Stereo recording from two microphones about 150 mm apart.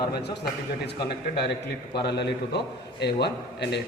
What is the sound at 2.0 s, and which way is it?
A man's voice, 90° left.